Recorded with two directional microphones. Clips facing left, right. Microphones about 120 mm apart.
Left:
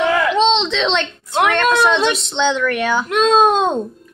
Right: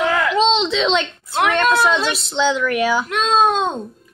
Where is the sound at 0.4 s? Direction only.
10° right (ahead or behind).